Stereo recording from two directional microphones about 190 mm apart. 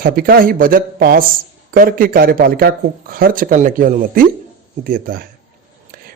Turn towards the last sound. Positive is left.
turn(degrees=-50)  # may be behind; listen again after turning